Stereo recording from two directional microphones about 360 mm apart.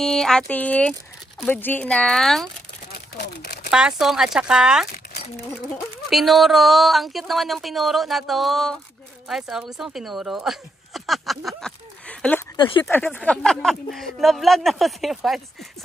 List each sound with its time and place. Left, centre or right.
0.0 s speech: centre
2.9 s a sound: left
3.7 s a woman's voice: centre